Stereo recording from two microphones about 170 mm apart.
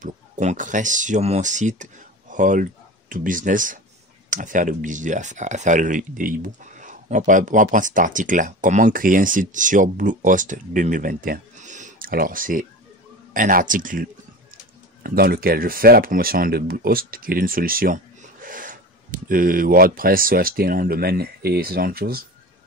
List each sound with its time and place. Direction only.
0.0 s speech: 45° right (ahead or behind)
15.0 s speech: 65° right (ahead or behind)